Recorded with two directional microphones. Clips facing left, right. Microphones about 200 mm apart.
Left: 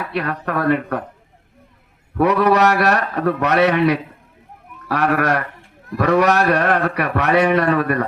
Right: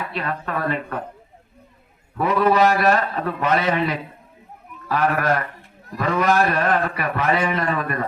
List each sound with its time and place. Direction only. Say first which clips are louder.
0.1 s a man's voice: left 4 dB; 75° left (ahead or behind)
2.1 s a man's voice: left 3 dB; 70° left (ahead or behind)